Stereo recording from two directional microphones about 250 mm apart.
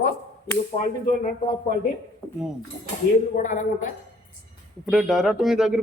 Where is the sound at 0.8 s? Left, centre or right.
Left.